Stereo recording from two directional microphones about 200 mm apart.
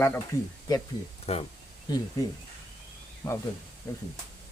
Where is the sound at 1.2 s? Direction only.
30° left (ahead or behind).